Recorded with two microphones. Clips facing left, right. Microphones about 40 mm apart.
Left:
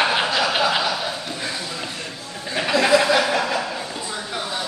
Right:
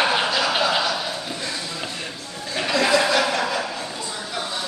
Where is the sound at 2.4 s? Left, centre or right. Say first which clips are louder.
Left 2 dB; centre.